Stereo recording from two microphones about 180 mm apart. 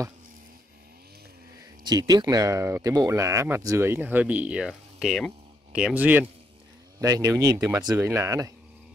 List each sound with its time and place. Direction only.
1.9 s speech: 20° right (ahead or behind)